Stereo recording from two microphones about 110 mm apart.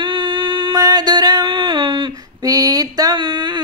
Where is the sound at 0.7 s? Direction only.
40° right (ahead or behind).